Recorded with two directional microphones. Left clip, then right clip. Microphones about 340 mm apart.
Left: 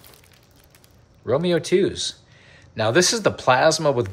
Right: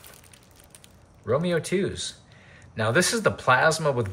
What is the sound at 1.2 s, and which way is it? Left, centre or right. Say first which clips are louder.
Speech: left 4 dB; centre.